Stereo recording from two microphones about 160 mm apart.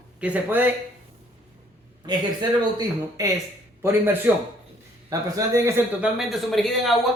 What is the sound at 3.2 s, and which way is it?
Speech, 25° right (ahead or behind).